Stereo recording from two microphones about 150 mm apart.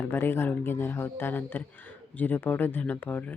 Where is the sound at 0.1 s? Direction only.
15° left (ahead or behind).